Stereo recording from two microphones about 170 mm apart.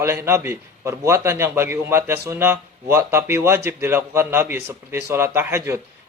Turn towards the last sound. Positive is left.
turn(degrees=-15)  # may be behind; listen again after turning